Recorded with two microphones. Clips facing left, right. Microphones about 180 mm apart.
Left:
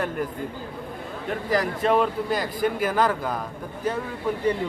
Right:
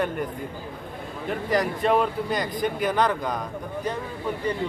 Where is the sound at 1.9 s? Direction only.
Centre (ahead or behind).